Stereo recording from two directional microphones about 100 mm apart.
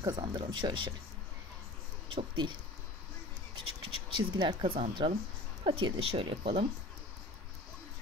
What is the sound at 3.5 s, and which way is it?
Scratch, 45° right (ahead or behind).